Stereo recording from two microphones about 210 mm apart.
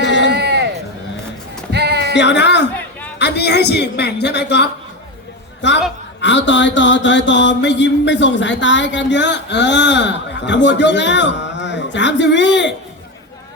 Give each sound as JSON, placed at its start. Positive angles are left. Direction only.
{"t": 0.0, "sound": "run", "side_deg": 60}
{"t": 0.3, "sound": "run", "side_deg": -50}
{"t": 1.7, "sound": "music", "side_deg": -50}
{"t": 2.1, "sound": "mantra", "side_deg": 55}
{"t": 3.2, "sound": "a man's voice", "side_deg": 55}
{"t": 5.6, "sound": "mantra", "side_deg": 60}